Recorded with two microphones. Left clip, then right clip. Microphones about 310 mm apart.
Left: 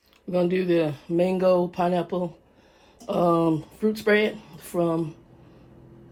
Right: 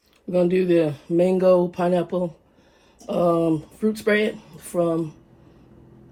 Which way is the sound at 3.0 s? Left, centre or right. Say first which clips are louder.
Right 1 dB; left.